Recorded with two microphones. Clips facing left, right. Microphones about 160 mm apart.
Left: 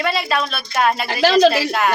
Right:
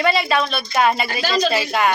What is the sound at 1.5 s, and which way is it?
Speech, centre (ahead or behind).